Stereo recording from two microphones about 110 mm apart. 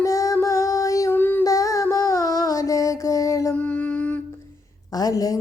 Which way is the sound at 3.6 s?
15° left (ahead or behind).